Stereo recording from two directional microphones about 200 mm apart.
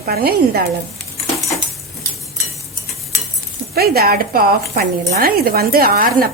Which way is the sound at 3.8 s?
50° right (ahead or behind).